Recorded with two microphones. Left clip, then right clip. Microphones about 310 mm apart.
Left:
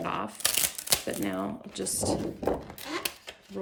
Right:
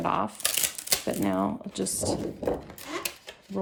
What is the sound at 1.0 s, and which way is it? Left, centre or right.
Speech, centre.